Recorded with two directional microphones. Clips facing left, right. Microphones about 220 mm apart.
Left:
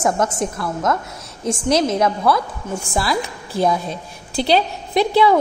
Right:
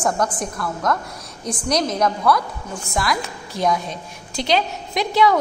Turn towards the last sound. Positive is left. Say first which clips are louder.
# left 3 dB
turn(degrees=30)  # may be behind; listen again after turning